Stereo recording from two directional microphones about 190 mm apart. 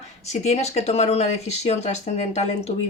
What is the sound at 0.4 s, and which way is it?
Speech, 35° left (ahead or behind).